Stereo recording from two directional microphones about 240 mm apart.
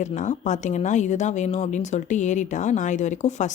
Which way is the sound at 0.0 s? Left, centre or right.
Left.